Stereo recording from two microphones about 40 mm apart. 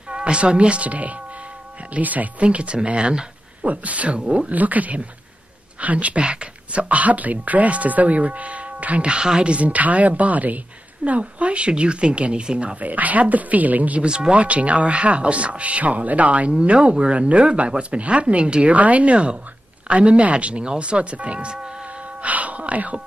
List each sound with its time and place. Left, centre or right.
0.1 s speech: right
3.6 s speech: right
9.0 s speech: right
12.8 s speech: right
14.0 s speech: right
14.4 s speech: right
18.8 s speech: right
22.2 s speech: right